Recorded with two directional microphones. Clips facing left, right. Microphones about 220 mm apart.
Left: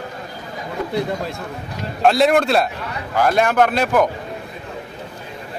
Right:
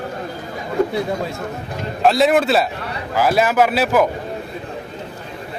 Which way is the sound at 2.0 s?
Centre (ahead or behind).